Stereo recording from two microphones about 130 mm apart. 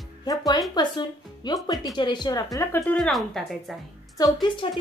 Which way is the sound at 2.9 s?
Centre (ahead or behind).